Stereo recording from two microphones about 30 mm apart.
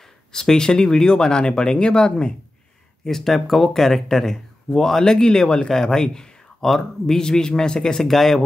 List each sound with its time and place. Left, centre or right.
0.3 s speech: left
3.0 s speech: centre
5.0 s speech: left
6.6 s speech: centre
7.2 s speech: left
8.0 s speech: centre